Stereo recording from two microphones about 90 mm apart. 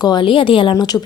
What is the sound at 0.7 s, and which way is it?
Speech, 45° left (ahead or behind).